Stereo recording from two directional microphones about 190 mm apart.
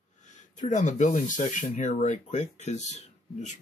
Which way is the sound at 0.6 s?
40° left (ahead or behind).